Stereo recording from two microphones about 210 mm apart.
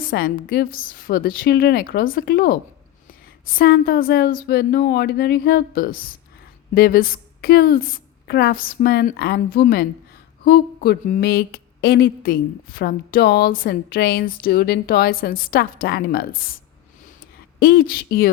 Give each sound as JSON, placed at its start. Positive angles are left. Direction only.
{"t": 0.0, "sound": "speech", "side_deg": 45}
{"t": 17.6, "sound": "speech", "side_deg": 45}